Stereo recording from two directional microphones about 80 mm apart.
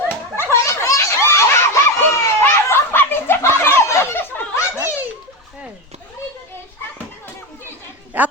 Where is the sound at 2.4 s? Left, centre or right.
Left.